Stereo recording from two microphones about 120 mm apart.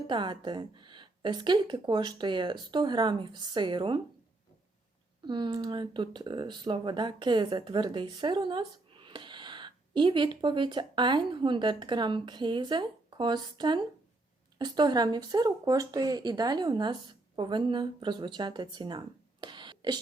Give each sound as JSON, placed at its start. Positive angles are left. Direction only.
{"t": 0.1, "sound": "speech", "side_deg": -40}
{"t": 5.2, "sound": "speech", "side_deg": -40}